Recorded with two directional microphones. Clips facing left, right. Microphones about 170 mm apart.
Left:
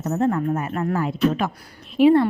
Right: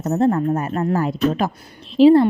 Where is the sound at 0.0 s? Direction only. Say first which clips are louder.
Right 4 dB; 35° right (ahead or behind).